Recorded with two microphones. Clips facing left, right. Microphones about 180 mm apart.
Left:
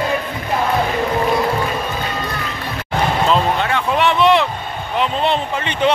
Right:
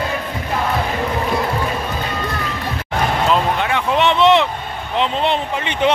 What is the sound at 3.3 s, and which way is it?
Vehicle, 15° right (ahead or behind).